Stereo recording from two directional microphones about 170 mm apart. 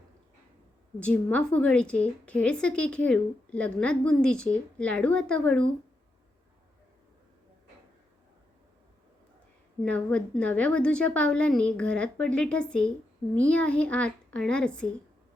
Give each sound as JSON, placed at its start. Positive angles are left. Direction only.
{"t": 0.9, "sound": "a woman's voice", "side_deg": 5}
{"t": 9.8, "sound": "a woman's voice", "side_deg": 10}